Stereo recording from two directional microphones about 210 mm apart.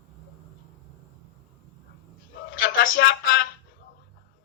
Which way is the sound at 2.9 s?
50° left (ahead or behind).